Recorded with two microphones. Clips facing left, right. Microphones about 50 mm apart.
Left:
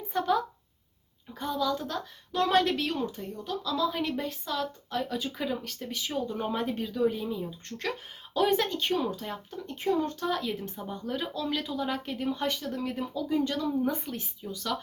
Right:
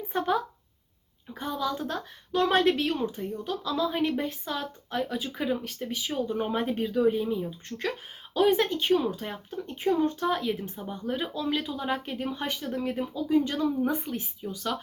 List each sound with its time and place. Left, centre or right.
0.1 s a woman's voice: right
6.7 s a woman's voice: right
7.7 s speech: centre